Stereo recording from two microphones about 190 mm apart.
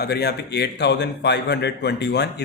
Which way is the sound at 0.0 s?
55° left (ahead or behind).